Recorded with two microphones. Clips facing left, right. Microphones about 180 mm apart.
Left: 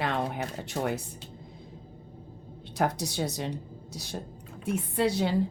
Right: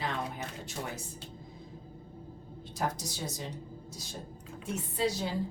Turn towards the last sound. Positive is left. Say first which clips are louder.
# left 5 dB
turn(degrees=65)  # may be behind; listen again after turning